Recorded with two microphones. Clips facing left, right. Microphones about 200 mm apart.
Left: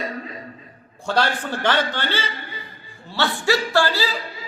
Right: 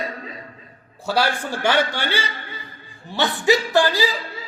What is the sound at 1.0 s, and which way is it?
A man's voice, 10° right (ahead or behind).